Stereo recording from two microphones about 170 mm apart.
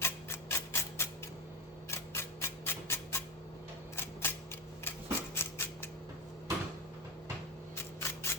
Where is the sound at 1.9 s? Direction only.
15° left (ahead or behind).